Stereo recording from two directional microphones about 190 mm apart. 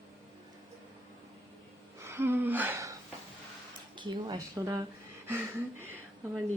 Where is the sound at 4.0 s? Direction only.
25° right (ahead or behind).